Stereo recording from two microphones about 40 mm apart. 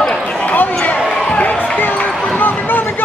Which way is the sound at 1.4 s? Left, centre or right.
Left.